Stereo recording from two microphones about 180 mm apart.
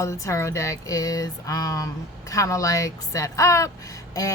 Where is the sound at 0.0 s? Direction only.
15° left (ahead or behind).